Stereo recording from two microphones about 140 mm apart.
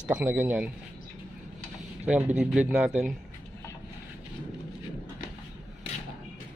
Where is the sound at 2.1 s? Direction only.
10° right (ahead or behind).